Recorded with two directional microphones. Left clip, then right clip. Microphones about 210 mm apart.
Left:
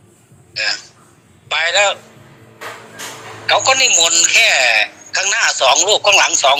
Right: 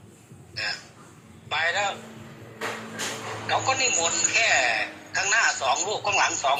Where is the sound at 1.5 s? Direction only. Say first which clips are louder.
Left 11 dB; 45° left (ahead or behind).